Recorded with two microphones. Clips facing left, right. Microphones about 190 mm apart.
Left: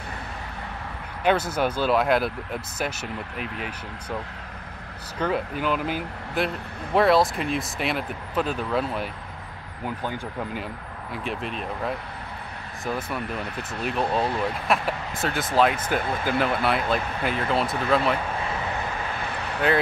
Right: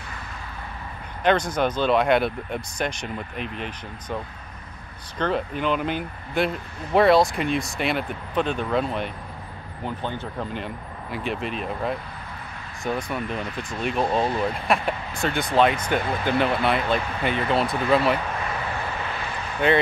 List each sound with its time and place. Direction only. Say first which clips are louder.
1.2 s speech: right 1 dB; 5° left (ahead or behind)
5.2 s speech: right 1 dB; 5° left (ahead or behind)